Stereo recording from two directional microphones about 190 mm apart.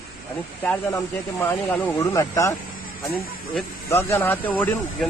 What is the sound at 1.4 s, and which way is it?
Speech, 10° left (ahead or behind).